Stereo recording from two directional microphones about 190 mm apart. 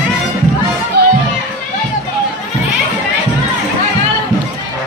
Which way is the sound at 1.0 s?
55° right (ahead or behind).